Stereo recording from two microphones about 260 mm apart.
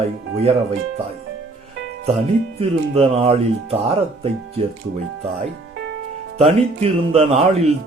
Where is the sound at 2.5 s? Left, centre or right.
Right.